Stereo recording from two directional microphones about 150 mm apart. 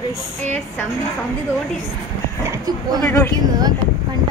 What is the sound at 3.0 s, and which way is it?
Speech, 15° left (ahead or behind).